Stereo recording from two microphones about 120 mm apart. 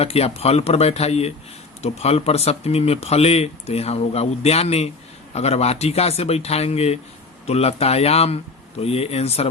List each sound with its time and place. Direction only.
0.0 s speech: 55° left (ahead or behind)